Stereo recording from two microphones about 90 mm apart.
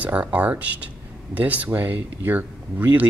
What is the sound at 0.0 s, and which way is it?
Speech, 15° right (ahead or behind).